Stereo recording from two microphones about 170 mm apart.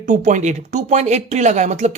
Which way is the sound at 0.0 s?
50° right (ahead or behind).